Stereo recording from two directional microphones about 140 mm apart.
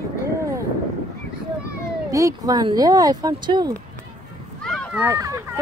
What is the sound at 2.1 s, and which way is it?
Speech, 25° right (ahead or behind).